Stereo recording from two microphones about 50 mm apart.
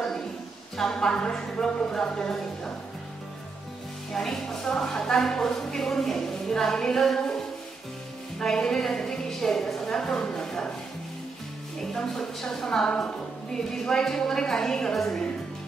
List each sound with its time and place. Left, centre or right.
0.7 s speech: centre
4.1 s speech: centre
8.4 s a woman's voice: centre
11.9 s speech: centre